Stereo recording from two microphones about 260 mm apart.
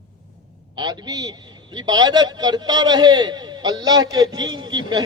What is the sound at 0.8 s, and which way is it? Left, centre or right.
A man's voice, centre.